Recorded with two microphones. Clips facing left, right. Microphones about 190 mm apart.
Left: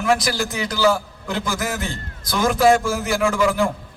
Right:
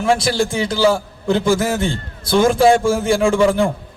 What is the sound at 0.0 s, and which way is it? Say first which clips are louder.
A man's voice: right 4 dB; 30° right (ahead or behind).